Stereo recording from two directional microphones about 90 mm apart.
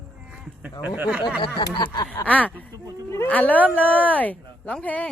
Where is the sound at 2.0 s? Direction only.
15° left (ahead or behind).